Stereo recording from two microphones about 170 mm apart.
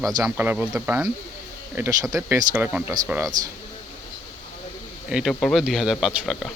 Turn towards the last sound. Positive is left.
turn(degrees=0)  # may be behind; listen again after turning